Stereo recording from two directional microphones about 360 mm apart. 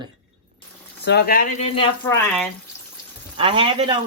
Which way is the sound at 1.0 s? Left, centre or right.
Left.